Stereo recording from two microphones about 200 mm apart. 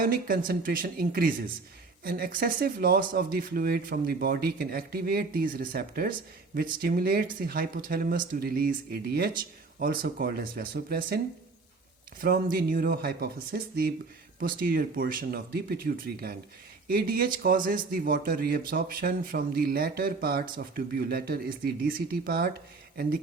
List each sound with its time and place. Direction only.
0.0 s speech: 45° right (ahead or behind)
12.2 s speech: 45° right (ahead or behind)